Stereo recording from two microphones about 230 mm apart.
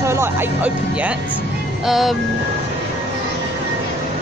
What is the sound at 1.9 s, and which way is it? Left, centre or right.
Music, centre.